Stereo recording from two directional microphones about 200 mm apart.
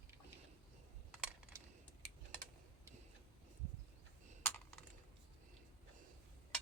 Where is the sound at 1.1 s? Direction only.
5° right (ahead or behind).